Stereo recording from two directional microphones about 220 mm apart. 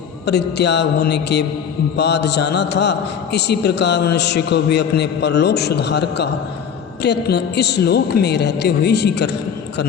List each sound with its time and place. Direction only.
0.3 s a man's voice: 50° left (ahead or behind)